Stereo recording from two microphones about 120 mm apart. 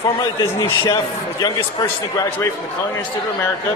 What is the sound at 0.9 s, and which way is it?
Speech, 25° left (ahead or behind).